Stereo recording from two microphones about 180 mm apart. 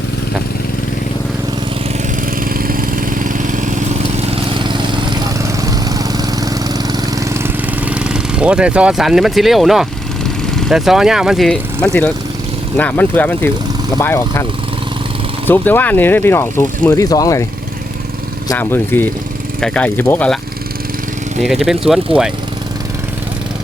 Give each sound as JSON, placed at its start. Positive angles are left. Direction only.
{"t": 2.4, "sound": "lawn mower", "side_deg": -55}
{"t": 4.6, "sound": "vehicle", "side_deg": -25}
{"t": 5.9, "sound": "lawn mower", "side_deg": -20}
{"t": 6.9, "sound": "engine", "side_deg": -15}
{"t": 10.7, "sound": "speech", "side_deg": 0}
{"t": 15.4, "sound": "speech", "side_deg": 10}
{"t": 18.5, "sound": "speech", "side_deg": 10}
{"t": 21.4, "sound": "speech", "side_deg": 0}